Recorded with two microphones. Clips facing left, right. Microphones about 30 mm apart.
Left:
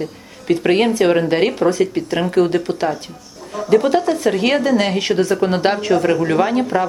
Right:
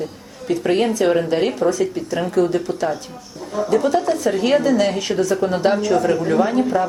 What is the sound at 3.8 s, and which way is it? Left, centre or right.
Speech, left.